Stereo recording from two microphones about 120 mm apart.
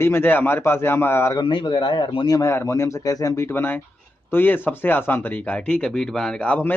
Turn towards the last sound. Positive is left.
turn(degrees=10)  # may be behind; listen again after turning